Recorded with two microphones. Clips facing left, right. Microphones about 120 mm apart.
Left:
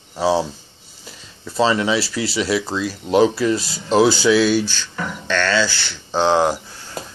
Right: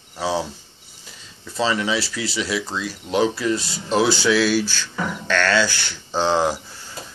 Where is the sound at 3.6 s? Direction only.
5° left (ahead or behind); by 6.2 s 15° right (ahead or behind).